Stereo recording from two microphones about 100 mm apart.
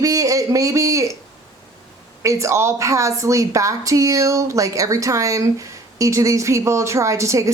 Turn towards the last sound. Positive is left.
turn(degrees=-30)  # may be behind; listen again after turning